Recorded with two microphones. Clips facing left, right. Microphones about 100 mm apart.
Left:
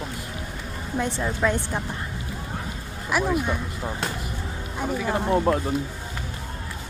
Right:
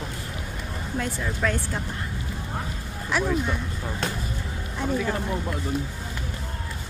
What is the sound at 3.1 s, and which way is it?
Speech, 10° left (ahead or behind).